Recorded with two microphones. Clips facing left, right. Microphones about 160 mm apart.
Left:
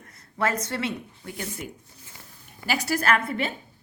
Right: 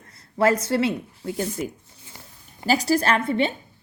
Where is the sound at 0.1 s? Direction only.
35° right (ahead or behind).